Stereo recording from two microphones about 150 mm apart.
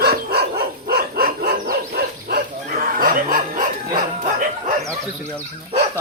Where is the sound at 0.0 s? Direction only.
90° right; by 3.7 s 70° right (ahead or behind).